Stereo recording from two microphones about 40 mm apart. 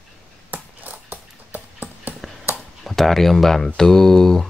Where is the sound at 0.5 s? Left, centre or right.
Right.